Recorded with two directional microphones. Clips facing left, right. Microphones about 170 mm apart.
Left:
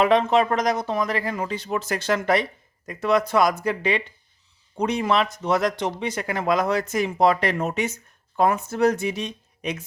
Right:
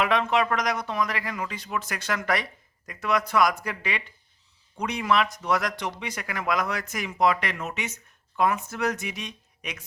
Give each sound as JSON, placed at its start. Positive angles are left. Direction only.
{"t": 0.0, "sound": "speech", "side_deg": 30}